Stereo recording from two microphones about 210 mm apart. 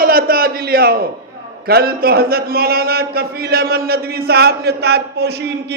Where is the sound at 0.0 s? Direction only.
45° right (ahead or behind).